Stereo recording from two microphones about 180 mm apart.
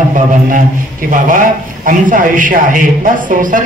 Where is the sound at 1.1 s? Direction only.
50° right (ahead or behind).